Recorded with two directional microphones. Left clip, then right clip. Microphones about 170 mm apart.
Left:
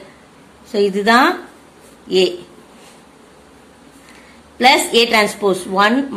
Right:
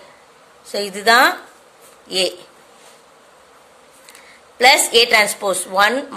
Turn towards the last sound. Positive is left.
turn(degrees=-40)  # may be behind; listen again after turning